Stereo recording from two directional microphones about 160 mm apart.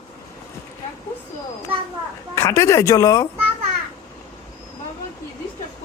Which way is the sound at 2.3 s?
15° left (ahead or behind).